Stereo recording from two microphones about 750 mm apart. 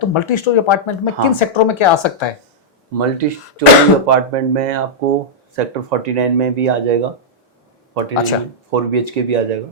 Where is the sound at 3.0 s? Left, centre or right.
Right.